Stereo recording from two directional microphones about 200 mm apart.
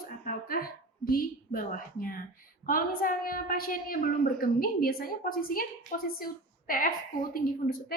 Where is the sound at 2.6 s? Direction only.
45° left (ahead or behind).